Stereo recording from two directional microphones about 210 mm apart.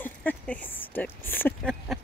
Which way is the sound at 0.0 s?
10° left (ahead or behind).